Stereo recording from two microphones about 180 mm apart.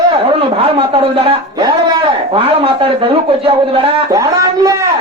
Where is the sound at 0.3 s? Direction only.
30° right (ahead or behind).